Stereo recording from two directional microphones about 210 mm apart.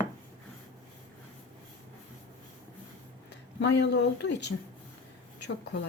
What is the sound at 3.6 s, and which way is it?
Speech, 55° left (ahead or behind).